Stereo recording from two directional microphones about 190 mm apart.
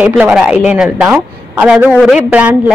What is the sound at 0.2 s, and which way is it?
A woman's voice, 5° right (ahead or behind).